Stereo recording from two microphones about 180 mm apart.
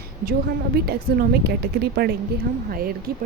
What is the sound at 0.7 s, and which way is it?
Speech, 60° right (ahead or behind).